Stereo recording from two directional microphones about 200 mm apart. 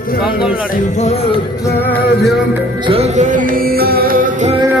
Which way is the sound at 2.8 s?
30° right (ahead or behind).